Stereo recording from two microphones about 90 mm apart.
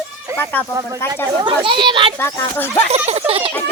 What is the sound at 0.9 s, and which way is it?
Speech, 25° left (ahead or behind).